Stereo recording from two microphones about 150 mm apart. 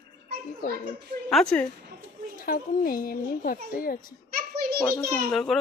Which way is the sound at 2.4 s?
70° left (ahead or behind).